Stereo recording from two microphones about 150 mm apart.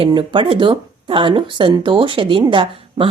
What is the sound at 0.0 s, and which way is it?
Speech, 35° right (ahead or behind).